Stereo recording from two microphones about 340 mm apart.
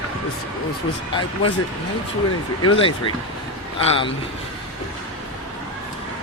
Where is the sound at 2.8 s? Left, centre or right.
Centre.